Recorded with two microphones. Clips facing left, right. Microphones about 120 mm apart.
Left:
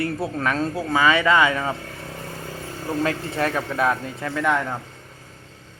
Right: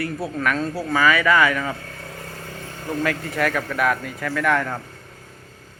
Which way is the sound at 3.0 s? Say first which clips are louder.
Right 1 dB; 30° left (ahead or behind).